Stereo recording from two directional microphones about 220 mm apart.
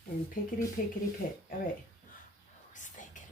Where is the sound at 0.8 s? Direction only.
40° left (ahead or behind).